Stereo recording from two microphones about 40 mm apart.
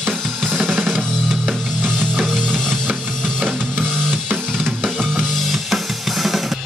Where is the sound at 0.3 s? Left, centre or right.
Right.